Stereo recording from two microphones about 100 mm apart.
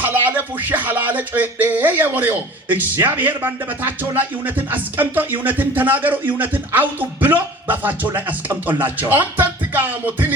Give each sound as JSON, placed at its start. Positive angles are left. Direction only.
{"t": 0.0, "sound": "music", "side_deg": -20}